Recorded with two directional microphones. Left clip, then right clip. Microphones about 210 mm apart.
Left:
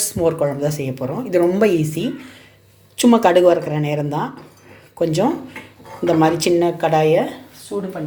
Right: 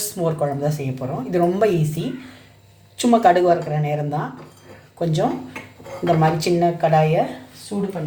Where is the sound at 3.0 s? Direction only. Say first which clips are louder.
Left 2 dB; 35° left (ahead or behind).